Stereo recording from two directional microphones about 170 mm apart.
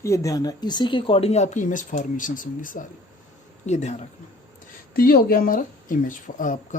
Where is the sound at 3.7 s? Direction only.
40° left (ahead or behind).